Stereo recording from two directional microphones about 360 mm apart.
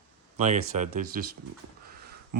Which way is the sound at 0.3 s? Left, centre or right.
Centre.